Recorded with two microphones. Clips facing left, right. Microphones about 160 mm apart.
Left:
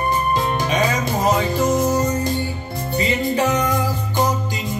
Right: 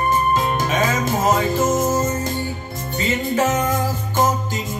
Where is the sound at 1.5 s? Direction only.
45° right (ahead or behind).